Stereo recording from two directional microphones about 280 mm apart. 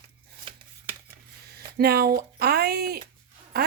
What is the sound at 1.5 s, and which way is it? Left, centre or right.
A woman's voice, right.